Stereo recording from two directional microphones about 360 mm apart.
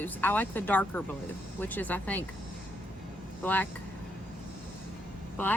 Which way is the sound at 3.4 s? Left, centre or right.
Centre.